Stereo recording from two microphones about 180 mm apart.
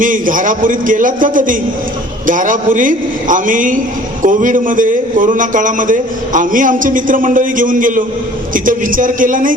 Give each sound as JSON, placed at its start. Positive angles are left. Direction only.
{"t": 0.0, "sound": "a man's voice", "side_deg": -50}